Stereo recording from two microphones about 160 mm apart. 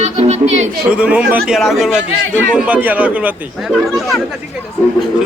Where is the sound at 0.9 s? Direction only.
5° right (ahead or behind).